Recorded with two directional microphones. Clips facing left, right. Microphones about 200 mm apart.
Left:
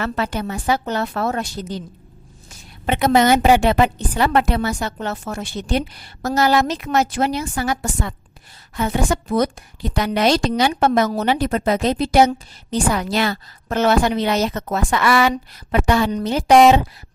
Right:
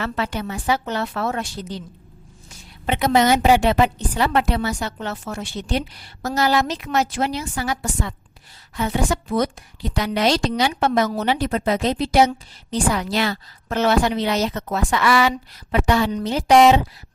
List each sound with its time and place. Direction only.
0.0 s a woman's voice: 45° left (ahead or behind)
2.8 s a woman's voice: 50° left (ahead or behind)